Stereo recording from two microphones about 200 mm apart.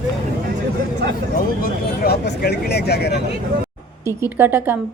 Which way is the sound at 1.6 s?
50° left (ahead or behind).